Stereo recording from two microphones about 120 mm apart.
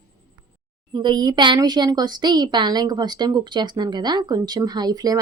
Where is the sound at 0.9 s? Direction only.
35° right (ahead or behind).